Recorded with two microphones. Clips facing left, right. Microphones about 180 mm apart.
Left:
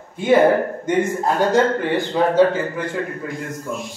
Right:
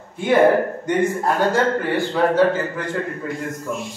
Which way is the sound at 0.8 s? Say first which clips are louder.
Left 2 dB; 20° left (ahead or behind).